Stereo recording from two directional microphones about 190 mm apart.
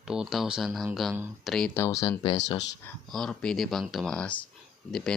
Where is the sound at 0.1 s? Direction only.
Centre (ahead or behind).